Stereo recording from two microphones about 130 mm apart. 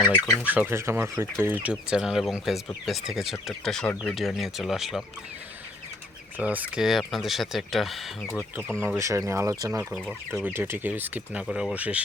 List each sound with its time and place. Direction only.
0.3 s speech: 10° right (ahead or behind)
6.3 s speech: 10° right (ahead or behind); by 8.9 s 5° left (ahead or behind)
9.0 s speech: 25° right (ahead or behind)